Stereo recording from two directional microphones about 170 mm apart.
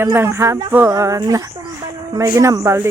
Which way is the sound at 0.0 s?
15° right (ahead or behind).